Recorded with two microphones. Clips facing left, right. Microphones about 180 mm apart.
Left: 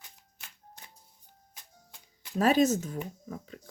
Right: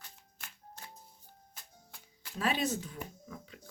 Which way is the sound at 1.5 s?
20° left (ahead or behind).